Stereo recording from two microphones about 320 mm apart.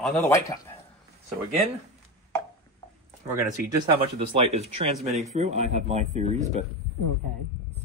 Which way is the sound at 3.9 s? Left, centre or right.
Centre.